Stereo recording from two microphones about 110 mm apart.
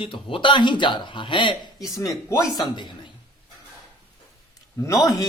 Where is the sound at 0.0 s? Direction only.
55° left (ahead or behind).